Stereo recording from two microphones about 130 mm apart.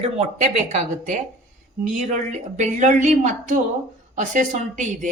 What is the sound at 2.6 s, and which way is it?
Speech, 70° right (ahead or behind).